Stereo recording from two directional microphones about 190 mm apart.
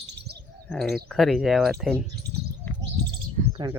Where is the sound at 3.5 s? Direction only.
25° right (ahead or behind).